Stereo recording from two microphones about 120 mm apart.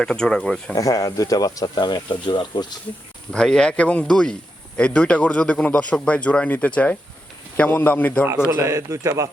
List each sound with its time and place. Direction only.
0.0 s speech: 5° left (ahead or behind)
0.8 s speech: 30° left (ahead or behind)
3.3 s speech: 5° left (ahead or behind)
8.4 s a man's voice: 30° right (ahead or behind)